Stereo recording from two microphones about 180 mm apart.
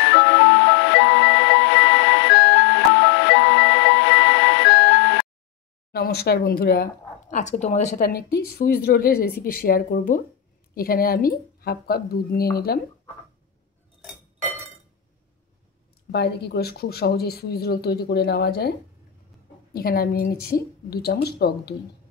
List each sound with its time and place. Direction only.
0.0 s music: 85° left
5.9 s speech: 60° left (ahead or behind); by 8.0 s 40° left (ahead or behind)
8.0 s speech: 60° left (ahead or behind)
16.1 s speech: 65° left (ahead or behind)